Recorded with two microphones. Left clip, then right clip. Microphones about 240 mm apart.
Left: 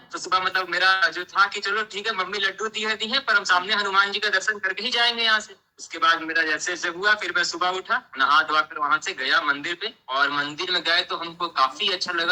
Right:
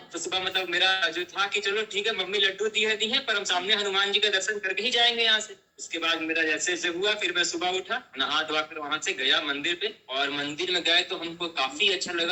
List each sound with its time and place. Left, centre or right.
0.3 s a man's voice: centre